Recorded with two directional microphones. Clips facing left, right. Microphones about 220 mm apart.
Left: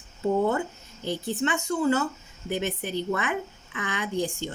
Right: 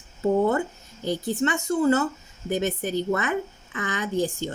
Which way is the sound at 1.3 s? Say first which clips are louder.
Right 2 dB; 45° right (ahead or behind).